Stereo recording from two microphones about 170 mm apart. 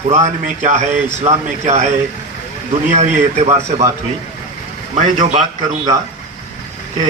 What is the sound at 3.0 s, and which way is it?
Speech, 40° right (ahead or behind).